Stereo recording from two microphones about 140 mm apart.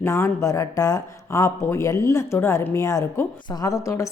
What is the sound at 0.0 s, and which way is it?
Speech, 20° left (ahead or behind).